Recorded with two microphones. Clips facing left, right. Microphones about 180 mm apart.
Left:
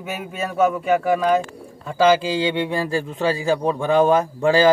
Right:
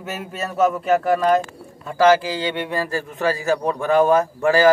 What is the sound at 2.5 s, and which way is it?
A man's voice, 15° left (ahead or behind).